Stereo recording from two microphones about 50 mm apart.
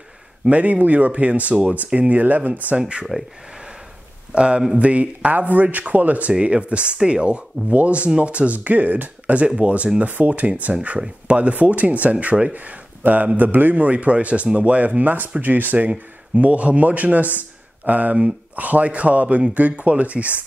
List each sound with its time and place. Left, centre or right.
0.5 s speech: right
2.8 s a man's voice: centre
4.3 s a man's voice: centre